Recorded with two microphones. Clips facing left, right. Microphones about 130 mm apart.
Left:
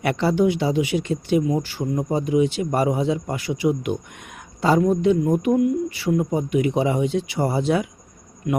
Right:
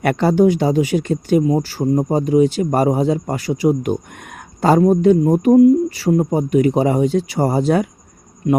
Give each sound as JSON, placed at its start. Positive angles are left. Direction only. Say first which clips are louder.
{"t": 0.0, "sound": "speech", "louder": "right 5 dB", "side_deg": -50}
{"t": 4.8, "sound": "speech", "louder": "right 6 dB", "side_deg": -40}